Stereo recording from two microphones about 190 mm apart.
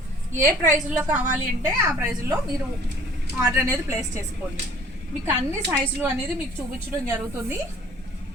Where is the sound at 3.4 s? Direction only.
10° right (ahead or behind).